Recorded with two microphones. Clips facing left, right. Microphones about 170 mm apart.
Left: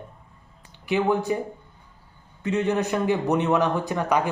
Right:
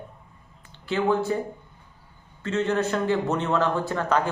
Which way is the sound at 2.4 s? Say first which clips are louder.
Left 1 dB; 15° left (ahead or behind).